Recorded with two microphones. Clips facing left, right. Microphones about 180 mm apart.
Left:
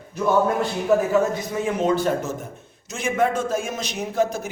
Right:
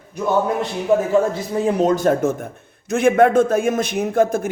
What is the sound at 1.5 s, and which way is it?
A man's voice, 35° right (ahead or behind).